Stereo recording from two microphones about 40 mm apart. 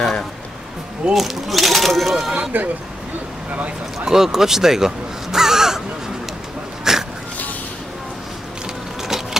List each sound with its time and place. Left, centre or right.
1.1 s speech: centre
2.5 s speech: right
4.0 s speech: centre
6.8 s a sound: centre
9.0 s vehicle: centre